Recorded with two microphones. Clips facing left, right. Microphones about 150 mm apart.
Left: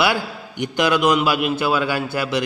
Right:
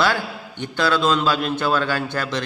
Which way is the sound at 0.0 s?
15° left (ahead or behind).